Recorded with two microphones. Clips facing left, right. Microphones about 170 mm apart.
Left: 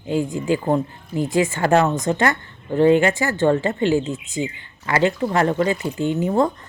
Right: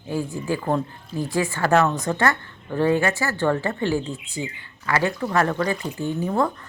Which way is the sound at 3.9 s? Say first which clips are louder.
Left 5 dB; 90° left.